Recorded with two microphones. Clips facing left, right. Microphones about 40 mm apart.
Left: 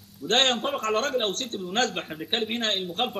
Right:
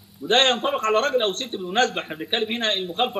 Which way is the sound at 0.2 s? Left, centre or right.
Centre.